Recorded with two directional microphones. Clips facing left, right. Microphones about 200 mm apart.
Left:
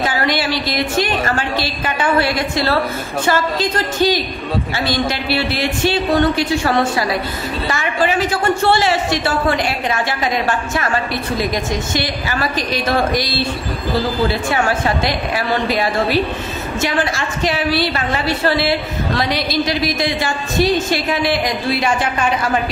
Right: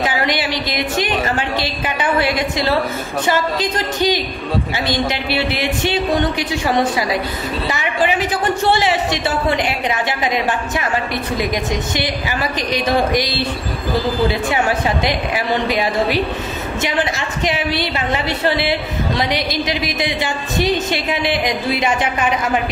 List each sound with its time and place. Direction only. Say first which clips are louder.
0.0 s a man's voice: left 1 dB; 15° right (ahead or behind)
11.9 s a man's voice: even; 15° right (ahead or behind)
14.5 s a man's voice: even; 15° right (ahead or behind)